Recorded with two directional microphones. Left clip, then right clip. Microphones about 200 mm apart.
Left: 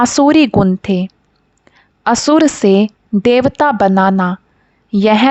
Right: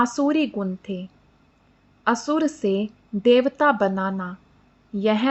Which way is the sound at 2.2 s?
50° left (ahead or behind).